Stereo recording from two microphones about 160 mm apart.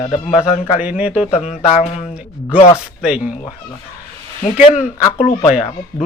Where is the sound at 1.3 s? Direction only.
45° left (ahead or behind).